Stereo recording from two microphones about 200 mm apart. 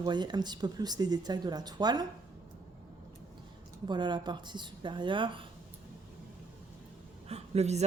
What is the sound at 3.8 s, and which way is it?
Speech, 20° right (ahead or behind).